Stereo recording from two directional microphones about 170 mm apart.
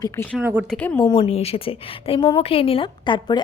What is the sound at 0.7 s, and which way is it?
Speech, 5° left (ahead or behind).